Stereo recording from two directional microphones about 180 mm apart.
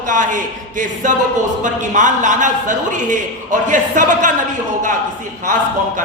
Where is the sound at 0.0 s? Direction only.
45° right (ahead or behind).